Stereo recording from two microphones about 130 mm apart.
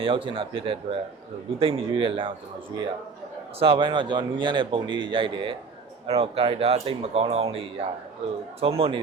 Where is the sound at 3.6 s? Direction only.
40° right (ahead or behind).